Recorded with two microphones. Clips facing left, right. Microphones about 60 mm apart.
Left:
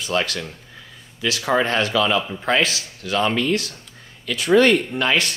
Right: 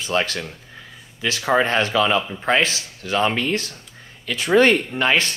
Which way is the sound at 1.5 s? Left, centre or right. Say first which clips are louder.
Right 1 dB; right.